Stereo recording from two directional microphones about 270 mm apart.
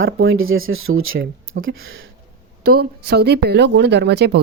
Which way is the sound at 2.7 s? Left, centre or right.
Right.